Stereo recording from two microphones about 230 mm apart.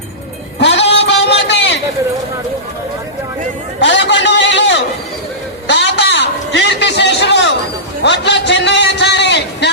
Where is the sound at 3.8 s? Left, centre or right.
Left.